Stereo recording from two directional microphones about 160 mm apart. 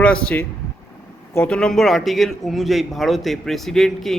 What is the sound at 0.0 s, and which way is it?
Speech, 10° left (ahead or behind).